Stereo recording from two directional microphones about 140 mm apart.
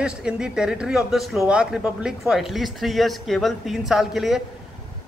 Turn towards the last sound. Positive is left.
turn(degrees=0)  # may be behind; listen again after turning